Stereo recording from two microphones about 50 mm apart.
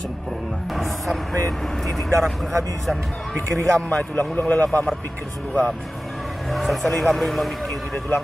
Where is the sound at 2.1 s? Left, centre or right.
Right.